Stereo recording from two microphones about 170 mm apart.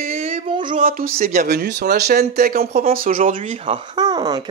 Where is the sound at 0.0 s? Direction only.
35° right (ahead or behind).